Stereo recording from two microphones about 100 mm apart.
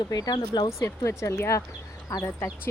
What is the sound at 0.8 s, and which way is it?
Speech, 30° left (ahead or behind).